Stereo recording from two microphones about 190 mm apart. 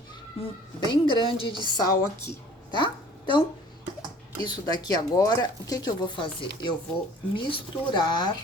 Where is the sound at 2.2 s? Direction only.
25° left (ahead or behind).